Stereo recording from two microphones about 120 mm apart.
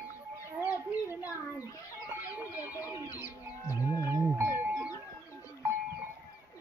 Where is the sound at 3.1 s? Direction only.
30° left (ahead or behind).